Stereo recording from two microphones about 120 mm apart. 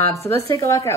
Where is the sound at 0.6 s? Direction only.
25° left (ahead or behind).